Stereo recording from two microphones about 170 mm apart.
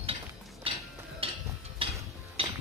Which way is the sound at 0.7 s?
35° right (ahead or behind).